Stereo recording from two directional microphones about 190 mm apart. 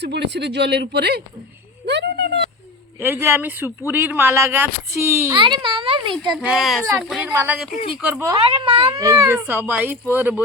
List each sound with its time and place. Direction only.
0.0 s speech: 65° right (ahead or behind)
1.9 s a sound: 65° right (ahead or behind)
3.0 s speech: 10° right (ahead or behind)
5.4 s a child's voice: 25° right (ahead or behind)
6.3 s a child's voice: 5° right (ahead or behind)
8.4 s a child's voice: 30° right (ahead or behind)
9.0 s speech: 15° right (ahead or behind)